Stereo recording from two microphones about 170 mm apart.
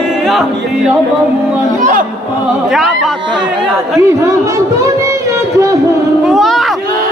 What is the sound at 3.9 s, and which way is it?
Speech, 15° right (ahead or behind).